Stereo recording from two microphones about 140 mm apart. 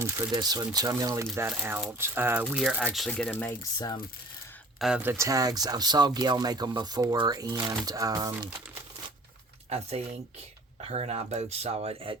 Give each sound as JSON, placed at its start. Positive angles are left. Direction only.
{"t": 0.3, "sound": "speech", "side_deg": -30}
{"t": 1.4, "sound": "speech", "side_deg": -15}
{"t": 3.6, "sound": "speech", "side_deg": 25}
{"t": 4.8, "sound": "speech", "side_deg": -5}
{"t": 5.1, "sound": "speech", "side_deg": -20}
{"t": 9.6, "sound": "speech", "side_deg": -45}